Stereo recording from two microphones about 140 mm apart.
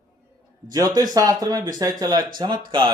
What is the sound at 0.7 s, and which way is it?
Speech, 25° right (ahead or behind).